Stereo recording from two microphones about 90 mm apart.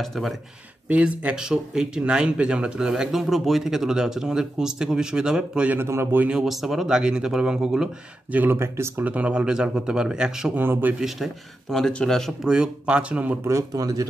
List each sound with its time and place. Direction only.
0.0 s speech: 5° left (ahead or behind)
0.8 s speech: 15° right (ahead or behind)
5.8 s a man's voice: 30° right (ahead or behind)
6.4 s speech: centre (ahead or behind)
8.3 s a man's voice: 20° right (ahead or behind)
9.0 s speech: 15° right (ahead or behind)
10.6 s a man's voice: 20° right (ahead or behind)
11.7 s speech: 5° left (ahead or behind)
12.4 s speech: 10° right (ahead or behind)
13.4 s speech: 35° right (ahead or behind)